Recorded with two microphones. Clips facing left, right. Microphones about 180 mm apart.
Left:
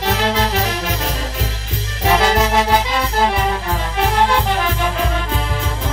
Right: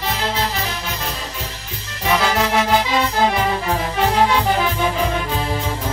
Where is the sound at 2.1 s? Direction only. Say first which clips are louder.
Left 3 dB; 35° left (ahead or behind).